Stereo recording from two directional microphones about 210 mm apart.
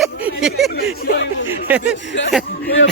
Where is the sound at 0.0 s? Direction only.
5° right (ahead or behind).